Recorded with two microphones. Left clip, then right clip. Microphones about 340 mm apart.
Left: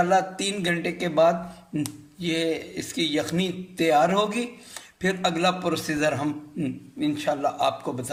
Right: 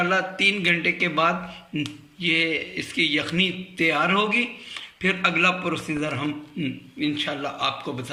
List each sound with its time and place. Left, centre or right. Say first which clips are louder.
0.1 s a man's voice: right 2 dB; left